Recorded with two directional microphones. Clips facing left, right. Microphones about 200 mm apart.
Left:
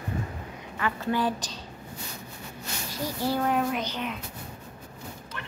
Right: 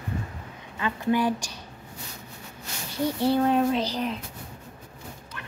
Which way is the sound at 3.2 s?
25° right (ahead or behind).